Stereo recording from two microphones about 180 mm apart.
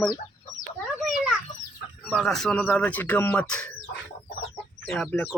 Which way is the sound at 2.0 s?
5° left (ahead or behind).